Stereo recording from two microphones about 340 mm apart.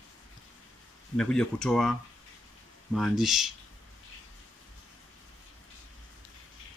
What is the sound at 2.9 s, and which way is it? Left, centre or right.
Speech, centre.